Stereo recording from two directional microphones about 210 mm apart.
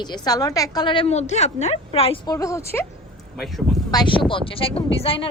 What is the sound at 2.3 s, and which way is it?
Speech, 15° left (ahead or behind).